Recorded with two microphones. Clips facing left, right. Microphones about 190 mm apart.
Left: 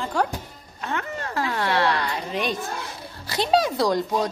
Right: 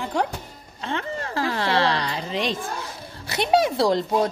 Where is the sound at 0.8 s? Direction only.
25° right (ahead or behind).